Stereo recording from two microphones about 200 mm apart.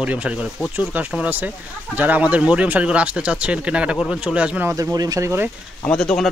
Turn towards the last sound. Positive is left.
turn(degrees=5)  # may be behind; listen again after turning